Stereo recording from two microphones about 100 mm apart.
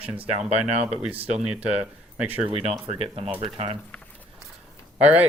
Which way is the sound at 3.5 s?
75° right (ahead or behind).